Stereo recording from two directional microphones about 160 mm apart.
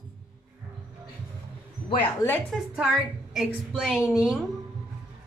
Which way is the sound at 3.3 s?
Centre (ahead or behind).